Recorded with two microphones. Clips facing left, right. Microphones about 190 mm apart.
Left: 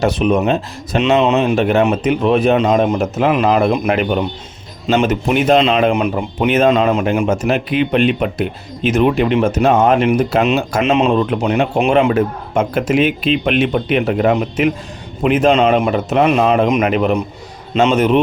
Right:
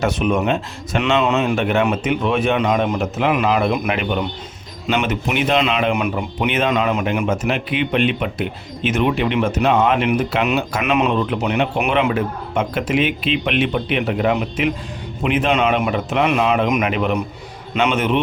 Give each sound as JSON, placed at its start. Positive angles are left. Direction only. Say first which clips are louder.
{"t": 0.0, "sound": "speech", "louder": "left 4 dB", "side_deg": 35}
{"t": 0.9, "sound": "speech", "louder": "left 4 dB", "side_deg": 20}
{"t": 1.5, "sound": "speech", "louder": "left 4 dB", "side_deg": 40}
{"t": 7.3, "sound": "speech", "louder": "left 4 dB", "side_deg": 40}
{"t": 10.8, "sound": "speech", "louder": "left 5 dB", "side_deg": 25}
{"t": 11.3, "sound": "speech", "louder": "left 4 dB", "side_deg": 45}
{"t": 15.5, "sound": "speech", "louder": "left 5 dB", "side_deg": 30}